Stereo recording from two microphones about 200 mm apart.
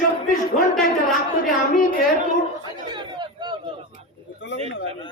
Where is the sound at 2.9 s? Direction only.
20° right (ahead or behind).